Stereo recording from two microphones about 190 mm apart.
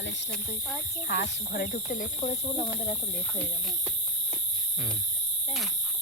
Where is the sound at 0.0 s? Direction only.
70° left (ahead or behind).